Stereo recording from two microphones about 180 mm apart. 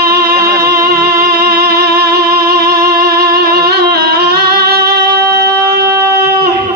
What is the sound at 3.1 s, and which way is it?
Music, 60° right (ahead or behind).